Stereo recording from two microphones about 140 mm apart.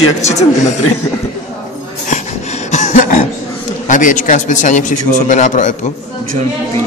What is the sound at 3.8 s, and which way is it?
A man's voice, 65° left (ahead or behind).